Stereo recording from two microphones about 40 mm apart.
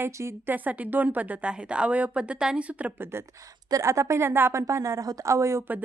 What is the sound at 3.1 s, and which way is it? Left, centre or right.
Speech, right.